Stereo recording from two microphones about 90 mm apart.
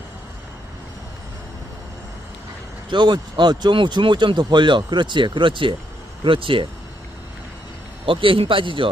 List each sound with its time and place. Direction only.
2.9 s a man's voice: 55° right (ahead or behind); by 6.7 s 75° right (ahead or behind)
8.0 s a man's voice: 75° right (ahead or behind)